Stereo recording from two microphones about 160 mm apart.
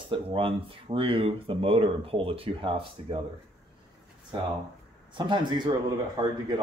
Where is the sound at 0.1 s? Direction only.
35° right (ahead or behind).